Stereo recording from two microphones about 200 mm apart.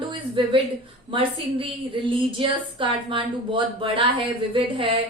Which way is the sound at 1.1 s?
25° right (ahead or behind).